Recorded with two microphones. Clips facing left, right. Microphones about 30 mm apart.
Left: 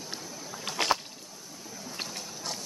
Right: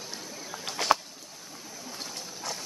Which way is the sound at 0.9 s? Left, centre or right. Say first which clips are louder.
Right 5 dB; centre.